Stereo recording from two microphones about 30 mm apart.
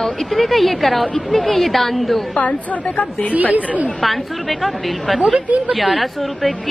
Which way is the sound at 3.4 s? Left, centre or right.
Right.